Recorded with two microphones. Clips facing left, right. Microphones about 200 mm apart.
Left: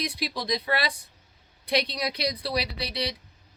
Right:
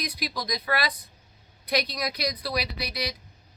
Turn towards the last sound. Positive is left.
turn(degrees=30)  # may be behind; listen again after turning